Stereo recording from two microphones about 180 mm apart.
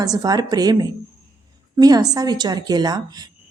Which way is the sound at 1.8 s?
20° right (ahead or behind).